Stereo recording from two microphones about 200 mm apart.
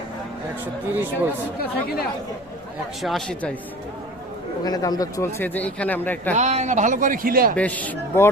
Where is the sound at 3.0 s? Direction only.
Centre (ahead or behind).